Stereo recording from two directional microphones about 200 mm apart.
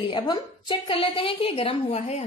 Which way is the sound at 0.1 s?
25° left (ahead or behind).